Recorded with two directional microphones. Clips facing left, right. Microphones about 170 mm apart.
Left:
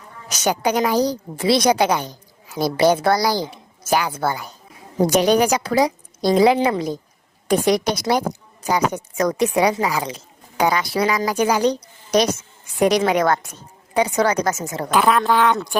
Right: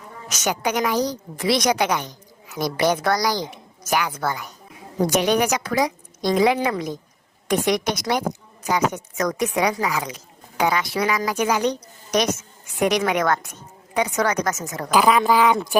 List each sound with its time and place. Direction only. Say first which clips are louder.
0.3 s a woman's voice: left 4 dB; 30° left (ahead or behind)
14.8 s speech: even; centre (ahead or behind)